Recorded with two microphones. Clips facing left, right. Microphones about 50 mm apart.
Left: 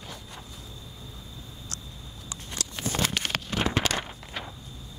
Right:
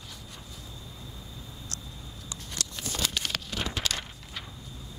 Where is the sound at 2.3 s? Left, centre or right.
Left.